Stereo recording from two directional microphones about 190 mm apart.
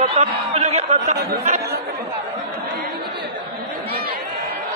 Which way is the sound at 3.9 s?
50° right (ahead or behind).